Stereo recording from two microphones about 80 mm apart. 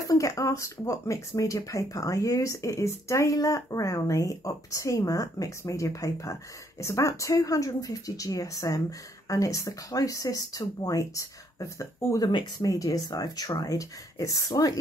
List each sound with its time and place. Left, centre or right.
0.0 s speech: left
12.3 s speech: left
12.6 s speech: left